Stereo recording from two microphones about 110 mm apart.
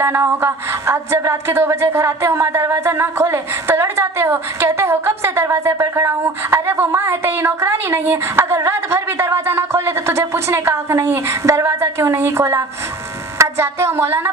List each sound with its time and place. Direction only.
0.0 s speech: 25° right (ahead or behind)